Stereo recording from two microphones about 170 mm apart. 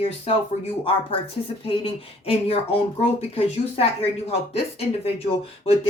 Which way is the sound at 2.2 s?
35° left (ahead or behind).